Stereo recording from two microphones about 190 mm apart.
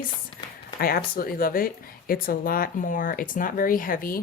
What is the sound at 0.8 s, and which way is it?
Speech, 50° left (ahead or behind).